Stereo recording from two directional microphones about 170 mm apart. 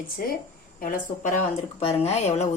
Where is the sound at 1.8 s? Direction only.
35° left (ahead or behind).